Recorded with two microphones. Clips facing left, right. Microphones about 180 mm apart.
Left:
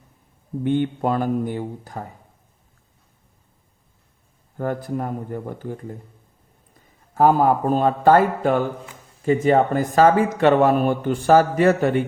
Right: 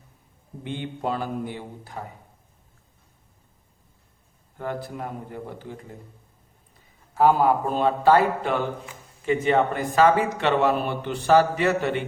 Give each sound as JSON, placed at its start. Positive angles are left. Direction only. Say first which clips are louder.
{"t": 0.6, "sound": "speech", "louder": "left 9 dB", "side_deg": 50}
{"t": 4.5, "sound": "speech", "louder": "left 6 dB", "side_deg": 45}
{"t": 7.1, "sound": "speech", "louder": "left 3 dB", "side_deg": 45}